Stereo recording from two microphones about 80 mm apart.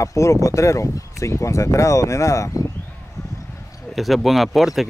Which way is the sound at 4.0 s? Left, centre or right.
Centre.